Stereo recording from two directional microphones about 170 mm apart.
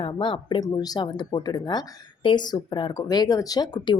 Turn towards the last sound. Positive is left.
turn(degrees=25)  # may be behind; listen again after turning